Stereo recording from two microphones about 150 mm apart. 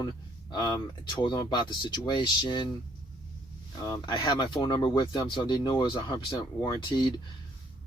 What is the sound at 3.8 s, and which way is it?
Speech, 25° left (ahead or behind).